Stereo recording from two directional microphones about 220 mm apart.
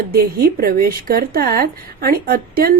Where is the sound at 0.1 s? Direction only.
45° right (ahead or behind).